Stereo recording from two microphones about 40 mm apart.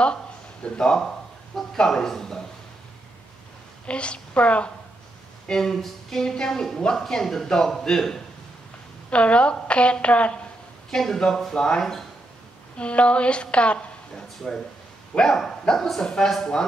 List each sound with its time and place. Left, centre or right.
0.0 s a sound: left
1.8 s speech: centre
3.8 s a woman's voice: left
5.5 s speech: centre
6.2 s speech: centre
9.1 s a woman's voice: left
10.9 s a woman's voice: centre; by 13.8 s left
14.1 s speech: centre
15.1 s a woman's voice: left